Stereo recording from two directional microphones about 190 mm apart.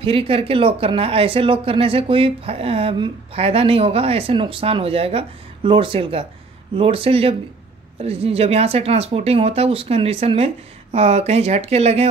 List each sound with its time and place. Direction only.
0.0 s speech: 30° right (ahead or behind)